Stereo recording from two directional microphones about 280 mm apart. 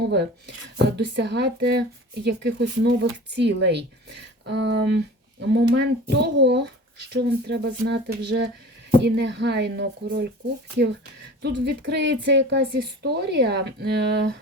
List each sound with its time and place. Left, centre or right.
0.1 s a woman's voice: right
11.4 s a woman's voice: right